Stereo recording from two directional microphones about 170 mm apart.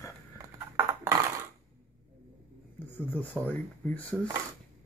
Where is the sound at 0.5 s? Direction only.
15° right (ahead or behind).